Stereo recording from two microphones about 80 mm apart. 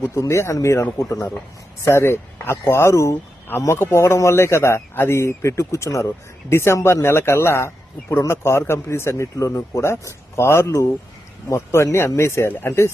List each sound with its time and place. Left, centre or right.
0.0 s speech: left